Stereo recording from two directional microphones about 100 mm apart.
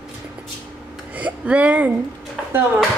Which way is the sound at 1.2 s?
15° right (ahead or behind).